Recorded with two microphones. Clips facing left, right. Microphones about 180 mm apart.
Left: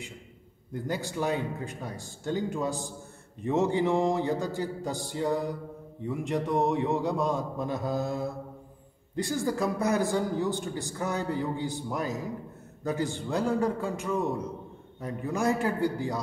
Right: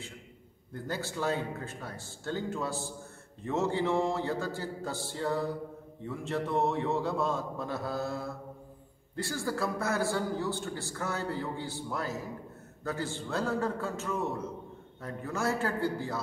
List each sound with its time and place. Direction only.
0.7 s a man's voice: 15° left (ahead or behind)